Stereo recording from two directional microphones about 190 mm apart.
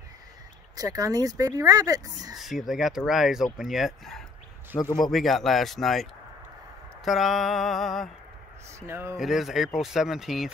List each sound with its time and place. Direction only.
0.7 s speech: 20° right (ahead or behind)
2.3 s speech: centre (ahead or behind)
4.7 s speech: 20° left (ahead or behind)
5.1 s speech: centre (ahead or behind)
7.1 s speech: centre (ahead or behind)
8.7 s speech: 15° right (ahead or behind)
9.1 s speech: centre (ahead or behind)